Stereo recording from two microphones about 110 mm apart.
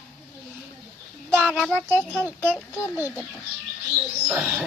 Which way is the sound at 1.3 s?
20° right (ahead or behind).